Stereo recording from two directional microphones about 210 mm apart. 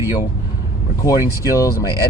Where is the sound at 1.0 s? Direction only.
15° left (ahead or behind).